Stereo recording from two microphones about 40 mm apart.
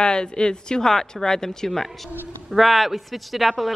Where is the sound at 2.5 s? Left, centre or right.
Centre.